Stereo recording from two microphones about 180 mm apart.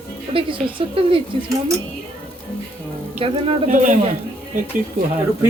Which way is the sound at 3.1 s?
30° right (ahead or behind).